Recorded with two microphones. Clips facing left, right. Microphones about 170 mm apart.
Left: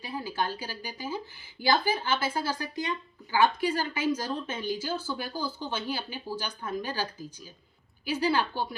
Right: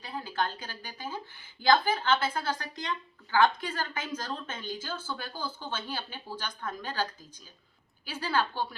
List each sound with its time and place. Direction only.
0.1 s a woman's voice: 10° left (ahead or behind)